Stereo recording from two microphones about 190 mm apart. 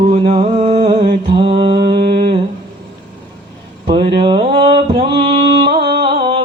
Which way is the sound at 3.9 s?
25° right (ahead or behind).